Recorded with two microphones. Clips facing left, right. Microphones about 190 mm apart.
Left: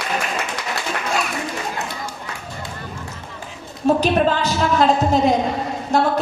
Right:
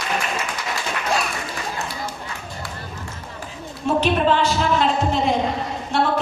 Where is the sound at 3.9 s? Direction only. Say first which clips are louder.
Left 2 dB; 40° left (ahead or behind).